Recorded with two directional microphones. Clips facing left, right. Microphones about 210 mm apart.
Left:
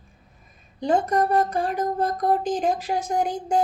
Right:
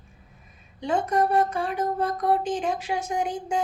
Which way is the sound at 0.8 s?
35° left (ahead or behind).